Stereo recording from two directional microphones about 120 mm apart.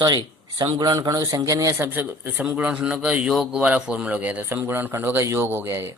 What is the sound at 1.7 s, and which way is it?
A man's voice, 20° right (ahead or behind).